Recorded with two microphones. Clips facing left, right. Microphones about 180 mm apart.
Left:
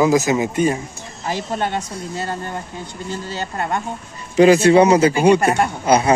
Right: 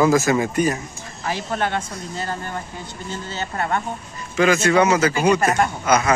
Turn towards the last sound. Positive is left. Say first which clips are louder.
# left 3 dB
turn(degrees=30)  # may be behind; listen again after turning